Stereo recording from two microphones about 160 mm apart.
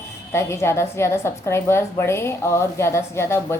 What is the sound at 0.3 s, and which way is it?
A woman's voice, 15° left (ahead or behind).